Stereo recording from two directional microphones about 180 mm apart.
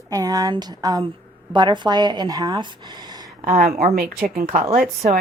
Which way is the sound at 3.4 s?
50° right (ahead or behind).